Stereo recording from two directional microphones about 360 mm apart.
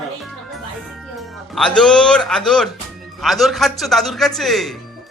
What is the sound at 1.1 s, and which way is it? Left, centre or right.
Speech, centre.